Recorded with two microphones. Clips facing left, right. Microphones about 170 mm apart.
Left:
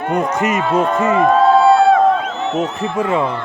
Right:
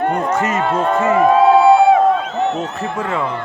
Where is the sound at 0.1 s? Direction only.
15° left (ahead or behind).